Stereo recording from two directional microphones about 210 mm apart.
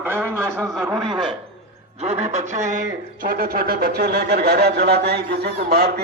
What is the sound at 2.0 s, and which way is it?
A man's voice, 30° right (ahead or behind).